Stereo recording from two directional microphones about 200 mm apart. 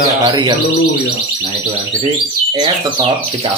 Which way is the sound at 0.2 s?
20° right (ahead or behind).